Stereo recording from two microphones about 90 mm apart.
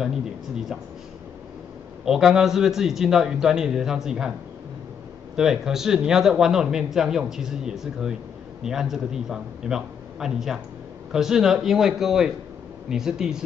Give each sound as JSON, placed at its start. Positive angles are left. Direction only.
{"t": 2.0, "sound": "a man's voice", "side_deg": -5}
{"t": 5.3, "sound": "a man's voice", "side_deg": -5}